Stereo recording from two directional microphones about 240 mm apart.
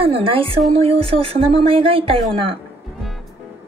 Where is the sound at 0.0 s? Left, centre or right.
Right.